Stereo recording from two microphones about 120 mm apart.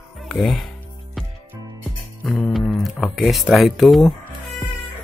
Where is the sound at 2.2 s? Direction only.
5° left (ahead or behind).